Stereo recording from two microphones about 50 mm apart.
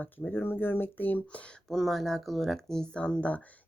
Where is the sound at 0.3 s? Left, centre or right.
Left.